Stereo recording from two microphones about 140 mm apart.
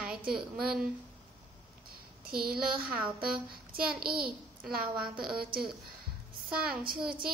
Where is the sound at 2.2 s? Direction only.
90° right.